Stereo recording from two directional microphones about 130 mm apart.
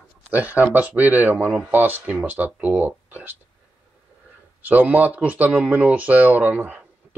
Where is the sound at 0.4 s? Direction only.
10° right (ahead or behind).